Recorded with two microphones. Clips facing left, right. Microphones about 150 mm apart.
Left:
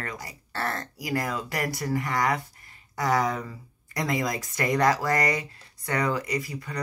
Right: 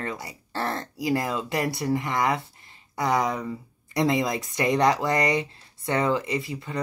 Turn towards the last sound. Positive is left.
turn(degrees=-25)  # may be behind; listen again after turning